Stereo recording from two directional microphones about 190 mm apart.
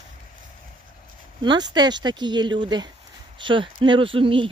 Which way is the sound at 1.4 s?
25° right (ahead or behind).